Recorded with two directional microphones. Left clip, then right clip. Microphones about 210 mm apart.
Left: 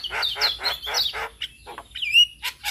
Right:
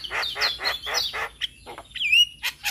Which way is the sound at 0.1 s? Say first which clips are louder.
Left 1 dB; 15° right (ahead or behind).